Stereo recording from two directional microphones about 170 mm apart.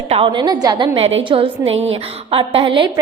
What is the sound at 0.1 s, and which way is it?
A woman's voice, 30° right (ahead or behind).